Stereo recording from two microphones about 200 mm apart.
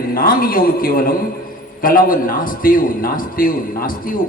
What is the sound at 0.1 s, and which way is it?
Music, 45° left (ahead or behind).